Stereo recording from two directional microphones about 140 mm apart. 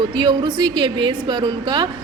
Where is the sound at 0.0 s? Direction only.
30° right (ahead or behind).